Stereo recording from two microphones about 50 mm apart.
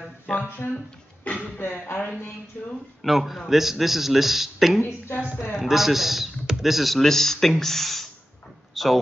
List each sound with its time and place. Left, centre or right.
0.6 s speech: left
1.2 s a sound: left
1.6 s speech: left
2.6 s speech: left
3.0 s speech: centre
8.8 s a sound: centre